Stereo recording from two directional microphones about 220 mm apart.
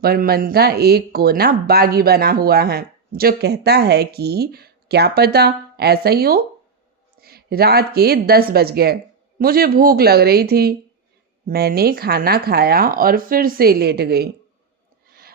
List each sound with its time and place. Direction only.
0.0 s speech: 45° right (ahead or behind)